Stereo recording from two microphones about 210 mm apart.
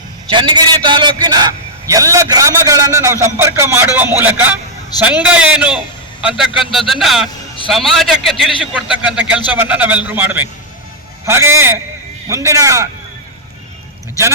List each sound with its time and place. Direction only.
0.3 s a man's voice: 20° right (ahead or behind)